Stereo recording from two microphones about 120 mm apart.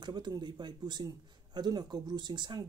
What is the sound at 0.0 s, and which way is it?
A man's voice, 40° right (ahead or behind).